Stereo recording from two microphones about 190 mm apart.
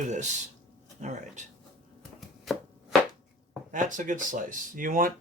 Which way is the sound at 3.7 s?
45° right (ahead or behind).